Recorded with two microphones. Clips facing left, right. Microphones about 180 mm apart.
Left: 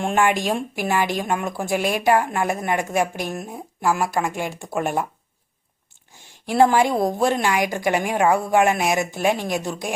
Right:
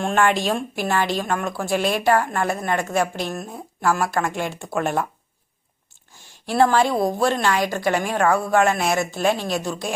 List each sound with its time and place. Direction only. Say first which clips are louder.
0.0 s a woman's voice: even; 10° left (ahead or behind)
6.4 s a woman's voice: left 1 dB; 15° left (ahead or behind)